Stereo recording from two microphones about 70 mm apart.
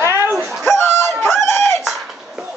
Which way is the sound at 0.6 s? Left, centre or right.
Left.